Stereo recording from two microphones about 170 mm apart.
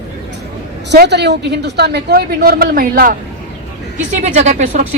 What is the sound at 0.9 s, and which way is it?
Speech, 90° right.